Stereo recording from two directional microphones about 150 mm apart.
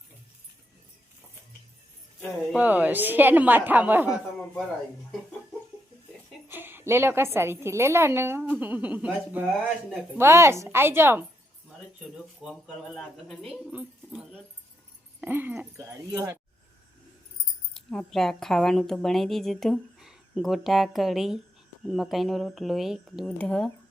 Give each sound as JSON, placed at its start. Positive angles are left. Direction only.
{"t": 2.6, "sound": "a woman's voice", "side_deg": -10}
{"t": 6.5, "sound": "a woman's voice", "side_deg": -15}
{"t": 12.1, "sound": "a woman's voice", "side_deg": 0}
{"t": 17.7, "sound": "speech", "side_deg": 0}